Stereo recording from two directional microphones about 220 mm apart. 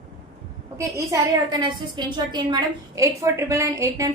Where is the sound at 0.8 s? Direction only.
15° right (ahead or behind).